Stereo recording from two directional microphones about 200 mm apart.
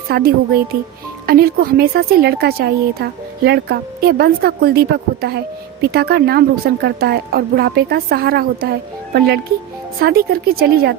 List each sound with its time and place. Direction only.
0.1 s a woman's voice: 50° right (ahead or behind)